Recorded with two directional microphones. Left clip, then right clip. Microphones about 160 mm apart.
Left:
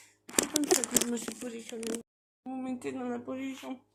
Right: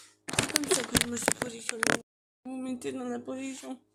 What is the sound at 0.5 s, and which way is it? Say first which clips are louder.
Speech: right 1 dB; 90° right.